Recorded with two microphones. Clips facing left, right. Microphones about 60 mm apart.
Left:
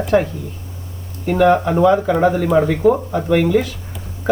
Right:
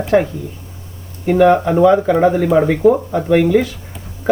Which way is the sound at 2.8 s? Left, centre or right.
Centre.